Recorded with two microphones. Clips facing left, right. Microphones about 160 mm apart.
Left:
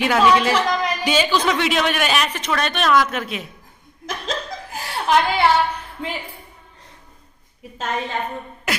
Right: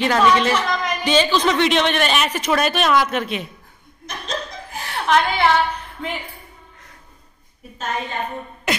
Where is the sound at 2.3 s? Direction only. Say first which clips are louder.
Right 4 dB; 10° right (ahead or behind).